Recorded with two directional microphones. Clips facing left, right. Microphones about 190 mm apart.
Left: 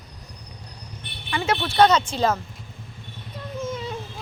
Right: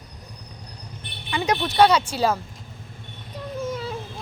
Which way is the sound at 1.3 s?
15° right (ahead or behind).